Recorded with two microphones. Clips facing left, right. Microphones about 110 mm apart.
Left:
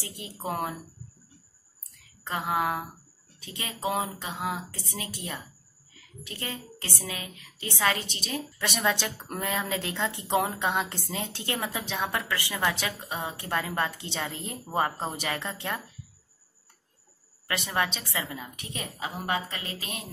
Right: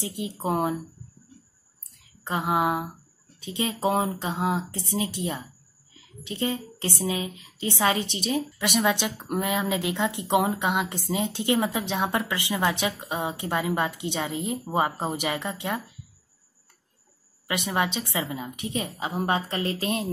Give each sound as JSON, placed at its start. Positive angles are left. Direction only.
{"t": 0.0, "sound": "speech", "side_deg": -20}
{"t": 2.0, "sound": "speech", "side_deg": -20}
{"t": 3.8, "sound": "a woman's voice", "side_deg": -35}
{"t": 17.5, "sound": "speech", "side_deg": -15}